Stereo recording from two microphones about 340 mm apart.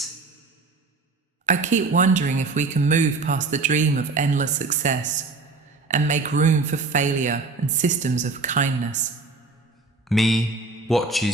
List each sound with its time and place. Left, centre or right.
1.5 s speech: right
10.1 s a man's voice: centre